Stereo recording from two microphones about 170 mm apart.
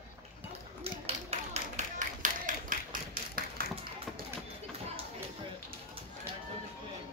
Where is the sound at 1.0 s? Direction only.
45° right (ahead or behind).